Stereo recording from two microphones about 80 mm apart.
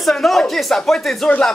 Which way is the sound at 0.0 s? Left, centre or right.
Centre.